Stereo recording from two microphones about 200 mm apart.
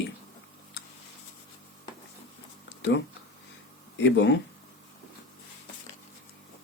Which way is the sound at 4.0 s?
60° left (ahead or behind).